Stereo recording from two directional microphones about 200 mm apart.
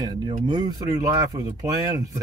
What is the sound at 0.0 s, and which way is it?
Speech, 20° right (ahead or behind).